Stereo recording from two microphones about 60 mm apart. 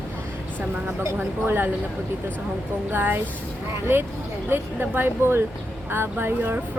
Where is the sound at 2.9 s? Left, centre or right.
Right.